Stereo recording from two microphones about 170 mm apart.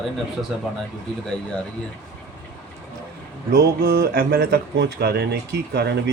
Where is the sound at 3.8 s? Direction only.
65° right (ahead or behind).